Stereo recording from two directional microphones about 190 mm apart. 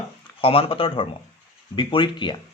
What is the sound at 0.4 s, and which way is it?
Speech, 30° left (ahead or behind).